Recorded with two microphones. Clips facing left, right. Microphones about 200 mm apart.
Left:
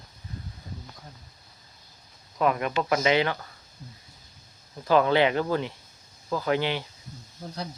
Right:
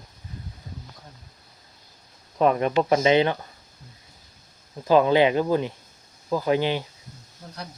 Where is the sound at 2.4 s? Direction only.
30° right (ahead or behind).